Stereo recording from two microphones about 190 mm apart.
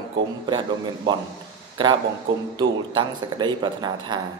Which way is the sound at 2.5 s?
25° right (ahead or behind).